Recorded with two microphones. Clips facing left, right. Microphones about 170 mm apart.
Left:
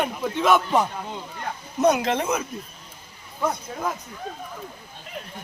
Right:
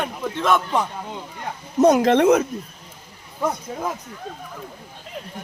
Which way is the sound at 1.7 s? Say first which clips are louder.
Right 5 dB; 45° right (ahead or behind).